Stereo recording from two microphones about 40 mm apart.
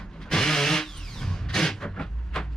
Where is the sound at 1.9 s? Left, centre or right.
Centre.